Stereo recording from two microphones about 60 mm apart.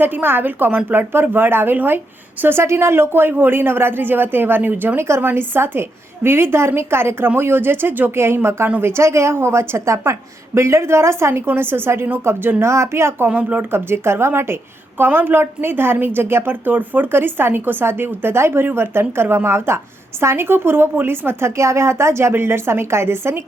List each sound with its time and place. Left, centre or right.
0.0 s a woman's voice: right
4.9 s a woman's voice: right
5.2 s a woman's voice: right
12.6 s a woman's voice: right
13.2 s speech: right
13.7 s a woman's voice: right